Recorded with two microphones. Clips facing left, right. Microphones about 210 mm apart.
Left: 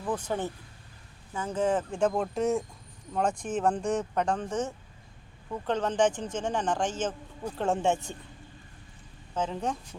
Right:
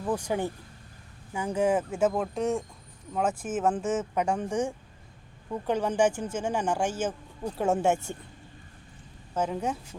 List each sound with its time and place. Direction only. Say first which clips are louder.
0.0 s speech: right 2 dB; 10° right (ahead or behind)
9.3 s speech: right 2 dB; 10° right (ahead or behind)